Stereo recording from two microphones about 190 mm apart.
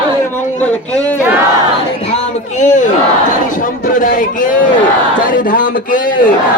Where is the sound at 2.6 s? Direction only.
40° left (ahead or behind).